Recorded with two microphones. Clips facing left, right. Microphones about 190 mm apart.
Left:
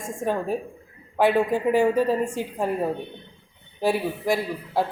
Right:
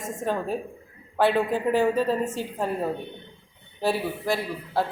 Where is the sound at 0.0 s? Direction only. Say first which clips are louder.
Left 2 dB; 10° left (ahead or behind).